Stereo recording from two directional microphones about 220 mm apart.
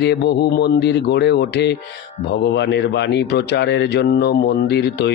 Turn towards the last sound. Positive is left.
turn(degrees=50)  # may be behind; listen again after turning